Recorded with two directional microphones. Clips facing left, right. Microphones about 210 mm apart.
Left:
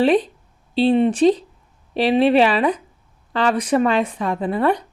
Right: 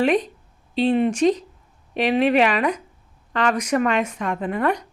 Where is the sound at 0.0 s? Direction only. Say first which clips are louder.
Left 3 dB; 30° left (ahead or behind).